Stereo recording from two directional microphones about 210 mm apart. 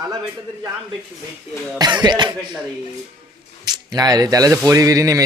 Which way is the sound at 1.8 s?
20° right (ahead or behind).